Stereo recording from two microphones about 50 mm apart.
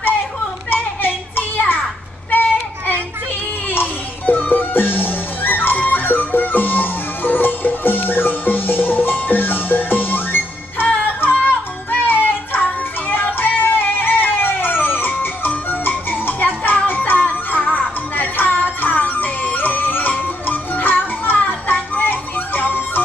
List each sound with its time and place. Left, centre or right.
0.7 s children playing: left
3.7 s music: left